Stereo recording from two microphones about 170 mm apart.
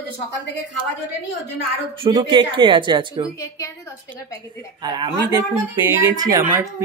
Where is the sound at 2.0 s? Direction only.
30° right (ahead or behind).